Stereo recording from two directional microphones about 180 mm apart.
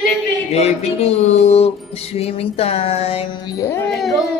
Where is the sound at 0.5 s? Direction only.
35° left (ahead or behind).